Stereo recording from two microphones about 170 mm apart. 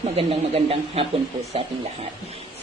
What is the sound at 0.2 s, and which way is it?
Speech, 35° right (ahead or behind).